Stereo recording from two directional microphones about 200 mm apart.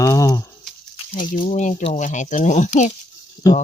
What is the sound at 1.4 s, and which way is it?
Speech, 35° left (ahead or behind).